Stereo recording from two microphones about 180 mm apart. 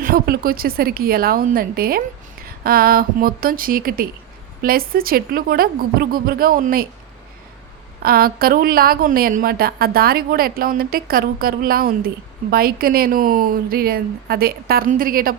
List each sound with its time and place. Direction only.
0.0 s a woman's voice: 55° right (ahead or behind)
8.0 s a woman's voice: 55° right (ahead or behind)